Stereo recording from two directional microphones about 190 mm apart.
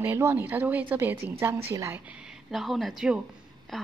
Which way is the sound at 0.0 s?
10° right (ahead or behind).